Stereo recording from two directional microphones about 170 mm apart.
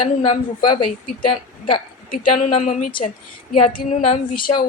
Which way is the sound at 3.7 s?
35° left (ahead or behind).